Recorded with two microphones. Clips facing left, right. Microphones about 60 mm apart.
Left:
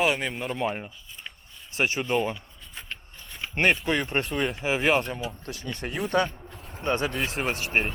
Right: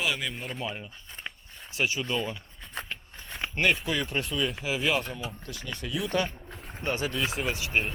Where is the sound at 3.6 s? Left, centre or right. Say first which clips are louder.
Left 3 dB; left.